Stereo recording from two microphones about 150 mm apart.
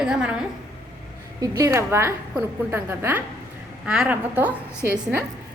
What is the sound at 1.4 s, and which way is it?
A woman's voice, 20° right (ahead or behind).